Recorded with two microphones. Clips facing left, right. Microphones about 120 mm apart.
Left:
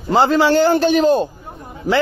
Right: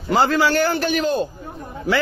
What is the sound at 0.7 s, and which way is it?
Speech, 35° left (ahead or behind).